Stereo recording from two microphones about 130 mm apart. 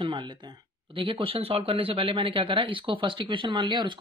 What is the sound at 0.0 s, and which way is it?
Speech, 35° right (ahead or behind).